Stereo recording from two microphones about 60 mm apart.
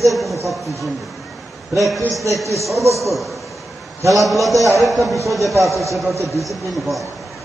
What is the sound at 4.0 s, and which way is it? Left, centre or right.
Speech, right.